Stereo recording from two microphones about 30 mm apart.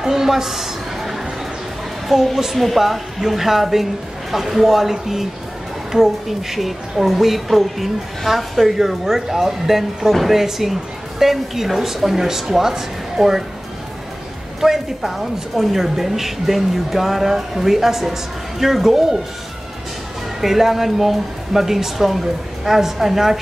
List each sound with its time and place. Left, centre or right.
0.0 s a sound: centre
2.1 s a woman's voice: centre
2.4 s a woman's voice: centre
14.6 s a woman's voice: centre
20.3 s a woman's voice: centre